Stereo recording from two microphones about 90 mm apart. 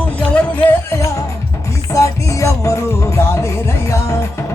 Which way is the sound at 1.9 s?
35° left (ahead or behind).